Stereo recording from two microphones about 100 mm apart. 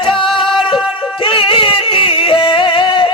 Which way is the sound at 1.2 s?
60° left (ahead or behind).